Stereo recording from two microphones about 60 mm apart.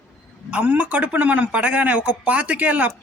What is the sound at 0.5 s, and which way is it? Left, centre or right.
Speech, right.